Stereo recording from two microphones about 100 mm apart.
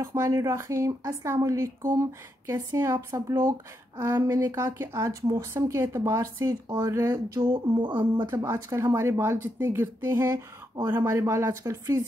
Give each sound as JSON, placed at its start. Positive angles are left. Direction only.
{"t": 0.0, "sound": "a woman's voice", "side_deg": -30}
{"t": 7.7, "sound": "speech", "side_deg": -55}
{"t": 8.4, "sound": "a woman's voice", "side_deg": -25}